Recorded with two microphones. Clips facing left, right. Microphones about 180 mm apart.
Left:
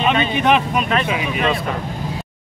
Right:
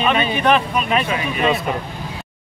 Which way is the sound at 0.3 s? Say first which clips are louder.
Even; 20° left (ahead or behind).